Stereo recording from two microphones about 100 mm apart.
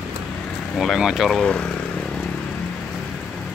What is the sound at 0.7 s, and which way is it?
Speech, 5° right (ahead or behind).